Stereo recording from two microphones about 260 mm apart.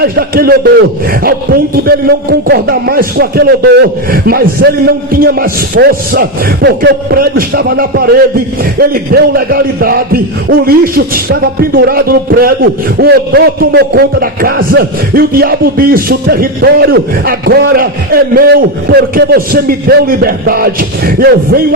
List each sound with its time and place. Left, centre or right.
0.0 s a man's voice: right